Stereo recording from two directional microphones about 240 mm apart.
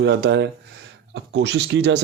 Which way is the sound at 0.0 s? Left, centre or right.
Right.